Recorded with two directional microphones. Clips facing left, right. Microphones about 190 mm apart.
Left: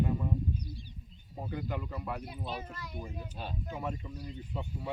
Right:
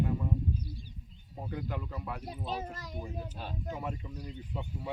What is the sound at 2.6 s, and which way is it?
Speech, 40° right (ahead or behind).